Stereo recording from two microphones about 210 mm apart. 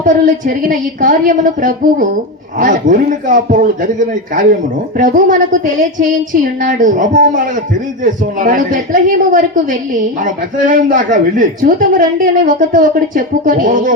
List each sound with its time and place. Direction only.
0.0 s a woman's voice: 40° right (ahead or behind)